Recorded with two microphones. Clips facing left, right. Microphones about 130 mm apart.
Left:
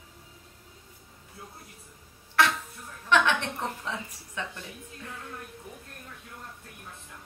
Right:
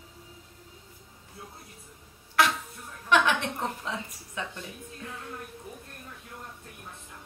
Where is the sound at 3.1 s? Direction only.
15° right (ahead or behind).